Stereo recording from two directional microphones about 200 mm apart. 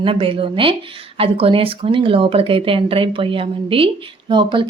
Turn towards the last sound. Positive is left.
turn(degrees=-25)  # may be behind; listen again after turning